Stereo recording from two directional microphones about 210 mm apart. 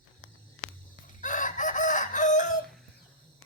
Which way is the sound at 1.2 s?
35° left (ahead or behind).